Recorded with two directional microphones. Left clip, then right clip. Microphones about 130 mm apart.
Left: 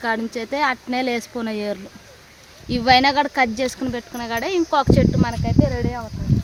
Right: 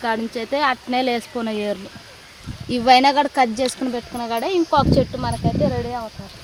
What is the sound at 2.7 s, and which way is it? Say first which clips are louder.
Speech: right 2 dB; 50° right (ahead or behind).